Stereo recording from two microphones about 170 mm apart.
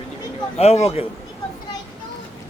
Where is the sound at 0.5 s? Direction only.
40° left (ahead or behind).